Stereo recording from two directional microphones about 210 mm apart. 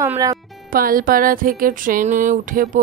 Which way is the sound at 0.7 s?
40° right (ahead or behind).